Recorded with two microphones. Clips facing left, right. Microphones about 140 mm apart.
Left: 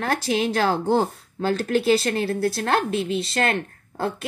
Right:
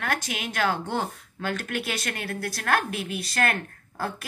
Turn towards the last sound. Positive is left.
turn(degrees=25)  # may be behind; listen again after turning